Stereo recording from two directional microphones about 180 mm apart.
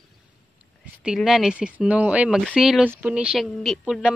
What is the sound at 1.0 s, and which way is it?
Speech, centre (ahead or behind).